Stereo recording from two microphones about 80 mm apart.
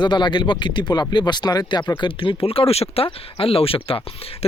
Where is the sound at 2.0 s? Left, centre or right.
Left.